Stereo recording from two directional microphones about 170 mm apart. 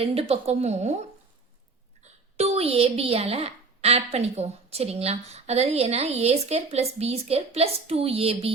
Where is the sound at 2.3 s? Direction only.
40° right (ahead or behind).